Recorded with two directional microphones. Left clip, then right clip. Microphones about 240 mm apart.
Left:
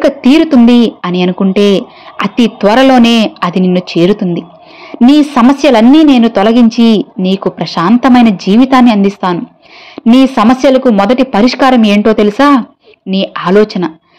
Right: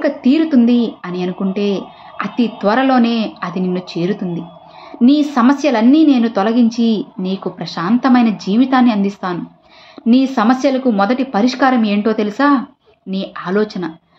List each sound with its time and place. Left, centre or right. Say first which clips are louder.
0.0 s speech: left 7 dB; left